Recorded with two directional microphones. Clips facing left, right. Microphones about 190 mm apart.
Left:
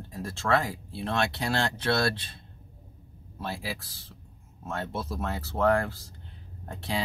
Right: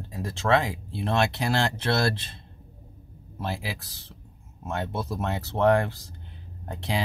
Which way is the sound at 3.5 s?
20° right (ahead or behind).